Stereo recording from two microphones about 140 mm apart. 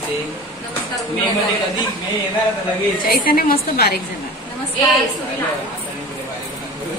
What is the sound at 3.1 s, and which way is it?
Speech, 90° left.